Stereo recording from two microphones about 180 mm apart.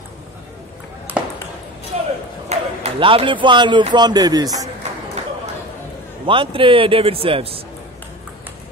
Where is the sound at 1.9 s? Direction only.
40° right (ahead or behind).